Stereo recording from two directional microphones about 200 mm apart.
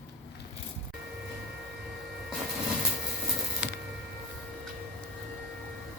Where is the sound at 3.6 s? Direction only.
60° left (ahead or behind).